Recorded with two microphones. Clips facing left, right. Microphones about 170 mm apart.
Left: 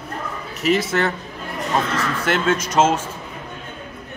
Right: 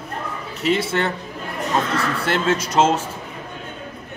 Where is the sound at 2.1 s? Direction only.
30° right (ahead or behind).